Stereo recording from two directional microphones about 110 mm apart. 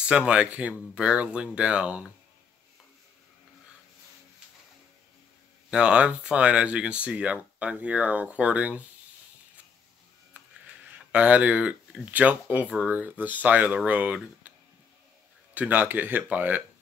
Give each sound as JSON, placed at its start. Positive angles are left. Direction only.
{"t": 0.1, "sound": "speech", "side_deg": -10}
{"t": 5.7, "sound": "speech", "side_deg": -10}
{"t": 11.1, "sound": "speech", "side_deg": -10}
{"t": 15.5, "sound": "speech", "side_deg": -15}